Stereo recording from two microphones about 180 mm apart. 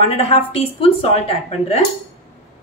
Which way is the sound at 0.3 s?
30° left (ahead or behind).